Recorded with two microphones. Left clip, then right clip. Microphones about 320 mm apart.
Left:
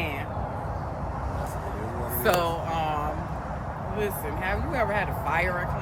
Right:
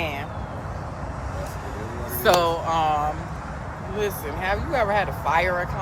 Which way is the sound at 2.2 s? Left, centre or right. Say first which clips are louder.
Right 6 dB; centre.